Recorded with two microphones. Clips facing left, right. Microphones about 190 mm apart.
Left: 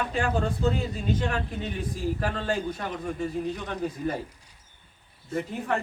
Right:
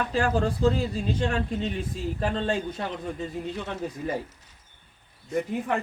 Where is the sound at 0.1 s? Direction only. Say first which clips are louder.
Right 2 dB; 35° right (ahead or behind).